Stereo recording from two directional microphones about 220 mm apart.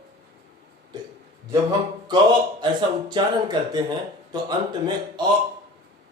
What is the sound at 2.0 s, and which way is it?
Speech, 20° right (ahead or behind).